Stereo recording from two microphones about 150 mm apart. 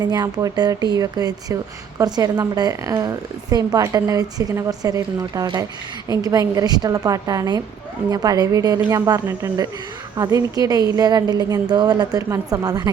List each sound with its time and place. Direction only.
0.0 s a woman's voice: 25° right (ahead or behind)